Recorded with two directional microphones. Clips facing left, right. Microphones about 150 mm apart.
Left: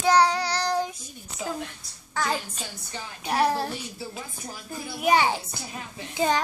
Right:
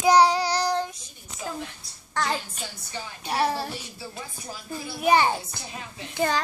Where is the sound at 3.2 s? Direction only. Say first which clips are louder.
Left 2 dB; 15° left (ahead or behind).